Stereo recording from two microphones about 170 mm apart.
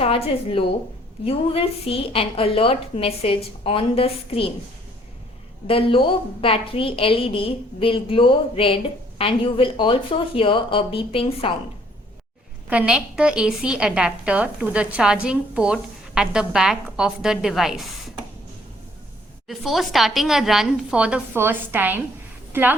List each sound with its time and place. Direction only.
0.0 s a woman's voice: 35° left (ahead or behind)
5.6 s a woman's voice: 30° left (ahead or behind)
12.7 s a woman's voice: 5° right (ahead or behind)
19.5 s a woman's voice: centre (ahead or behind)